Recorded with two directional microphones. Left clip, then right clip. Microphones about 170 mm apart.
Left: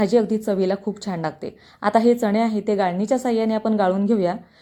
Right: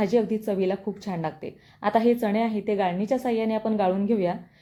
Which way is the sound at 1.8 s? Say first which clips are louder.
Left 4 dB; 20° left (ahead or behind).